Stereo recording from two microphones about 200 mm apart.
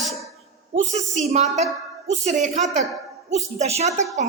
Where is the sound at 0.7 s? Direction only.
35° right (ahead or behind).